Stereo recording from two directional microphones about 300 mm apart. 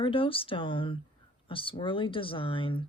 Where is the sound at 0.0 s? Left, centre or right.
Centre.